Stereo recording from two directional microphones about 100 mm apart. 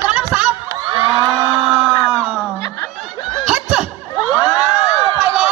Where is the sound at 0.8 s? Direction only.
55° right (ahead or behind).